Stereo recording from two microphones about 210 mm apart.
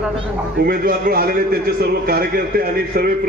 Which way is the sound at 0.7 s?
45° right (ahead or behind).